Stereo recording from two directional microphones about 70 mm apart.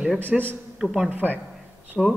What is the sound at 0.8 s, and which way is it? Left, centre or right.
Speech, centre.